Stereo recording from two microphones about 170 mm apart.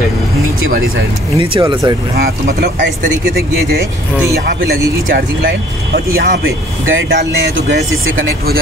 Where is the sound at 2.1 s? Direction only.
65° right (ahead or behind).